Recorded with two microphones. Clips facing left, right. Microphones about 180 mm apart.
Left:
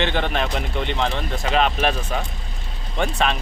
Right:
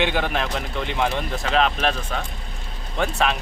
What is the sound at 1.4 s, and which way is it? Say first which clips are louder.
Speech: left 1 dB; 5° left (ahead or behind).